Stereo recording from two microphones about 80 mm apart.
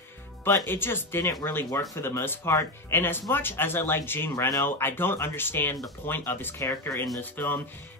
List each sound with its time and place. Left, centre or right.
0.4 s speech: left